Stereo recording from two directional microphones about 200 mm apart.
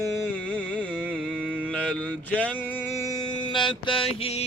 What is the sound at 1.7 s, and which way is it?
Mantra, 5° left (ahead or behind).